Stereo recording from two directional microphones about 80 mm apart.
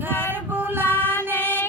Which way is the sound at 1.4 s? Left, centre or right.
Left.